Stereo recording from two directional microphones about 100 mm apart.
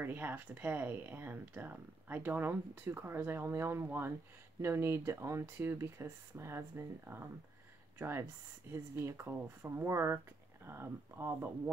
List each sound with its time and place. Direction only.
0.0 s speech: 20° right (ahead or behind)
8.0 s speech: 25° right (ahead or behind)